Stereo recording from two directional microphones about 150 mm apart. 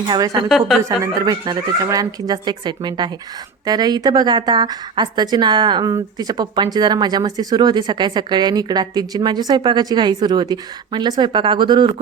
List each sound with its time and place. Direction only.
0.4 s a woman's voice: centre (ahead or behind)
0.9 s a woman's voice: 25° right (ahead or behind)